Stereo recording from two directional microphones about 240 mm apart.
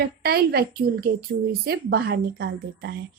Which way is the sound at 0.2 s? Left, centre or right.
Right.